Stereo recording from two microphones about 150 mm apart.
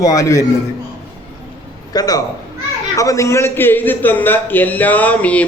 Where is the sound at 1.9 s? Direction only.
25° left (ahead or behind).